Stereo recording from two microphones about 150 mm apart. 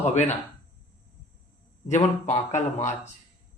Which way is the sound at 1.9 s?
50° left (ahead or behind).